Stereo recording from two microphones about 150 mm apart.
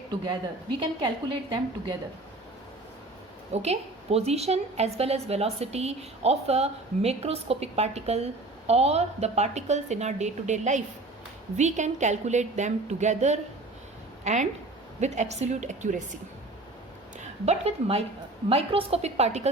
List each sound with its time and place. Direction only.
0.8 s a woman's voice: 30° right (ahead or behind)
3.5 s a woman's voice: 45° right (ahead or behind)
15.0 s a woman's voice: 50° right (ahead or behind)
17.2 s a woman's voice: 45° right (ahead or behind)